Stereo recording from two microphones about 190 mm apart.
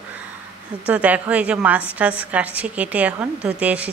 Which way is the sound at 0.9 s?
10° right (ahead or behind).